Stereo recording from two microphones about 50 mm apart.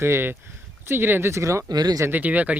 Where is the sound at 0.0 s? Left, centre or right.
Right.